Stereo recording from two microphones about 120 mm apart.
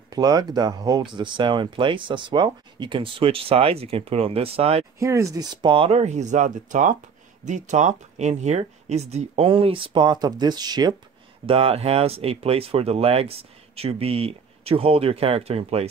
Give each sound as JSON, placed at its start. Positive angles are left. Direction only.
{"t": 0.1, "sound": "speech", "side_deg": -35}
{"t": 4.9, "sound": "speech", "side_deg": -25}
{"t": 11.4, "sound": "speech", "side_deg": -50}